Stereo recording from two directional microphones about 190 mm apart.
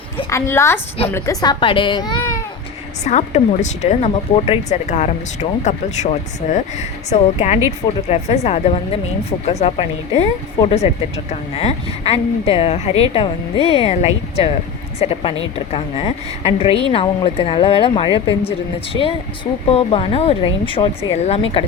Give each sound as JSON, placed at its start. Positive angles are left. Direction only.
{"t": 0.3, "sound": "a woman's voice", "side_deg": 15}
{"t": 3.0, "sound": "a woman's voice", "side_deg": 35}
{"t": 19.7, "sound": "a woman's voice", "side_deg": 30}